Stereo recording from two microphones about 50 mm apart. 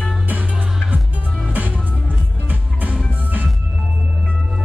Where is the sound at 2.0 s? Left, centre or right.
Right.